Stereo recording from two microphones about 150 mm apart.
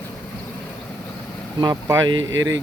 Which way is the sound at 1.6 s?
25° right (ahead or behind).